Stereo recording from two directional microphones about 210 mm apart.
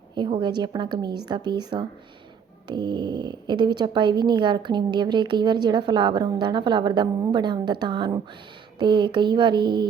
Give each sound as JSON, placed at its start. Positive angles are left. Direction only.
{"t": 0.2, "sound": "speech", "side_deg": -25}